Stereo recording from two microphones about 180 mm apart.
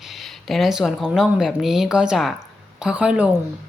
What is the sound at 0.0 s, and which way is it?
A woman's voice, centre (ahead or behind).